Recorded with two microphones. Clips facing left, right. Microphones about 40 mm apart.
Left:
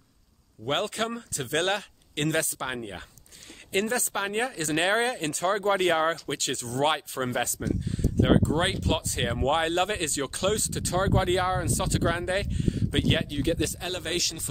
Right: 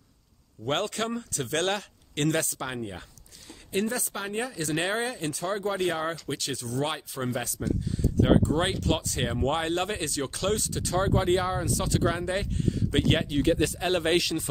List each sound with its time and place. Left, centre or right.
0.7 s speech: centre
3.7 s speech: left
5.0 s speech: left
6.8 s speech: left
7.8 s a sound: left
8.3 s speech: left
12.9 s speech: centre
13.3 s speech: centre
13.8 s speech: centre